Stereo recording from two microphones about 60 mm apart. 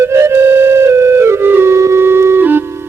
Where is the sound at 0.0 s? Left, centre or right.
Right.